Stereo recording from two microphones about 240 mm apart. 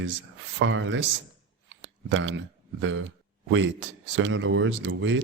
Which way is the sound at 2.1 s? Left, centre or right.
Right.